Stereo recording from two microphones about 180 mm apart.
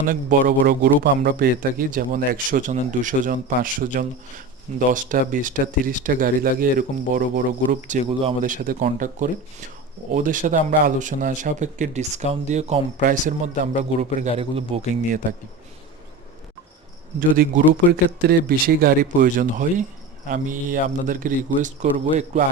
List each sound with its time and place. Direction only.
0.1 s speech: 50° right (ahead or behind)
10.2 s speech: 50° right (ahead or behind)
17.2 s speech: 50° right (ahead or behind)